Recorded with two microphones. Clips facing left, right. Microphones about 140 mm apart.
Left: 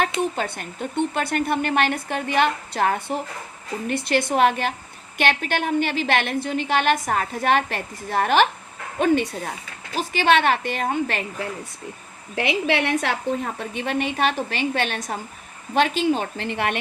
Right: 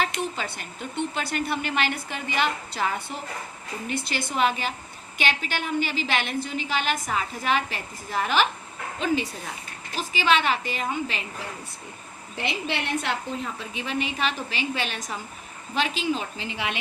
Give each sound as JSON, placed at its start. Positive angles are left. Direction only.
{"t": 0.0, "sound": "a woman's voice", "side_deg": 55}